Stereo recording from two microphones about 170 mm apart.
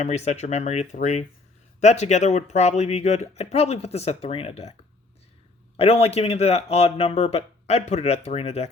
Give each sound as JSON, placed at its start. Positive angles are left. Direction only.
{"t": 0.0, "sound": "speech", "side_deg": 40}
{"t": 5.7, "sound": "speech", "side_deg": 35}